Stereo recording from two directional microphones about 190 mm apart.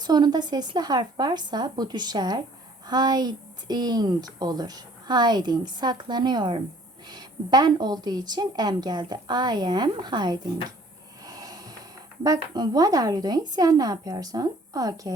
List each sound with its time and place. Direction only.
0.0 s a woman's voice: 20° right (ahead or behind)
11.3 s a sound: 20° right (ahead or behind)
12.2 s speech: 20° right (ahead or behind)